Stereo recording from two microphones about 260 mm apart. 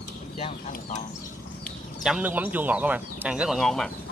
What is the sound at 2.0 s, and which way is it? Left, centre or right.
A man's voice, centre.